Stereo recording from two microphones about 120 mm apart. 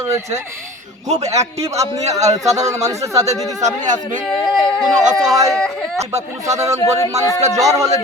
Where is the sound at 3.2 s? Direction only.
85° right.